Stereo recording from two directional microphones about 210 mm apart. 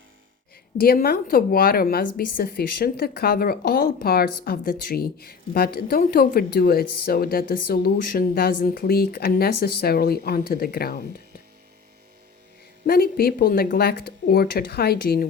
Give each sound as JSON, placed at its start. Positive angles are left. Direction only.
{"t": 0.8, "sound": "speech", "side_deg": 45}
{"t": 12.8, "sound": "speech", "side_deg": 45}